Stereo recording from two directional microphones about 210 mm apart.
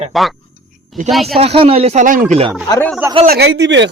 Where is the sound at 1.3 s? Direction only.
25° right (ahead or behind).